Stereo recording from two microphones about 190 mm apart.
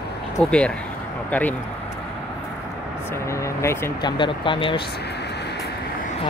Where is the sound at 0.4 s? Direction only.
5° left (ahead or behind).